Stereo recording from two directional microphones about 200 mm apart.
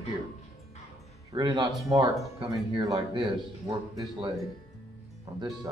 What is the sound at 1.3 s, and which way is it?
Speech, 25° right (ahead or behind).